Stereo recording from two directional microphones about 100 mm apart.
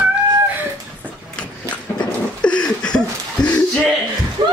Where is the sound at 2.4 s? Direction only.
10° left (ahead or behind).